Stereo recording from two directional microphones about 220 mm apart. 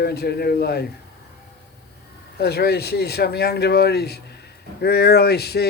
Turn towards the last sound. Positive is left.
turn(degrees=45)  # may be behind; listen again after turning